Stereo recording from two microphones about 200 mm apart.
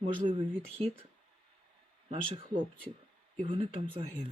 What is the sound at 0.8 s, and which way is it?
Speech, 30° right (ahead or behind).